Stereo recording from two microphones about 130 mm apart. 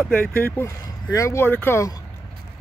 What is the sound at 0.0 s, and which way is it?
Speech, 15° left (ahead or behind).